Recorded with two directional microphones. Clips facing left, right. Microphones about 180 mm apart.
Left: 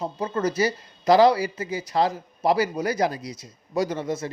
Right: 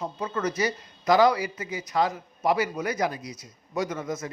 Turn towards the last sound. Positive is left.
turn(degrees=30)  # may be behind; listen again after turning